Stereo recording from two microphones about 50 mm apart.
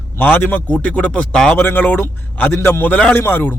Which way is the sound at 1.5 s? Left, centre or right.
Left.